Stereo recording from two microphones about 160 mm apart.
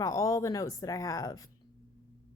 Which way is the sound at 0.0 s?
20° left (ahead or behind).